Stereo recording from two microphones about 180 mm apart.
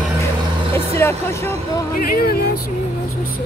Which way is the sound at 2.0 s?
55° left (ahead or behind).